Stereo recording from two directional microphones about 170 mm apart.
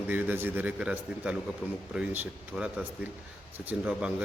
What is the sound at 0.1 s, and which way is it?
Speech, 10° right (ahead or behind).